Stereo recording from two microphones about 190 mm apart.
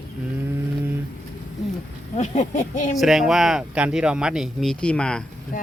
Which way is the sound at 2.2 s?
40° left (ahead or behind).